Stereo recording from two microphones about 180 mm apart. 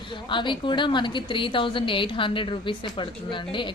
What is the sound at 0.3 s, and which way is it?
A woman's voice, 25° left (ahead or behind).